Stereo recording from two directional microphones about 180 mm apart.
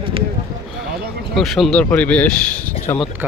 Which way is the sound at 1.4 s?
Centre (ahead or behind).